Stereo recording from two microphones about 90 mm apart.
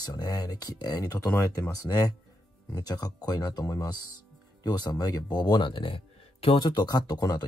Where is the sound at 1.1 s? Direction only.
25° left (ahead or behind).